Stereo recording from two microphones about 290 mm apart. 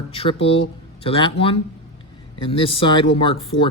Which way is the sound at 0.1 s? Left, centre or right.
Centre.